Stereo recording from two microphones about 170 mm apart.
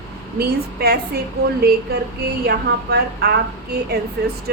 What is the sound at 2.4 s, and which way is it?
A woman's voice, 70° right (ahead or behind).